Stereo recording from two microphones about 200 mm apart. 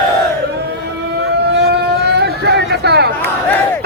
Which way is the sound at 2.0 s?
55° right (ahead or behind).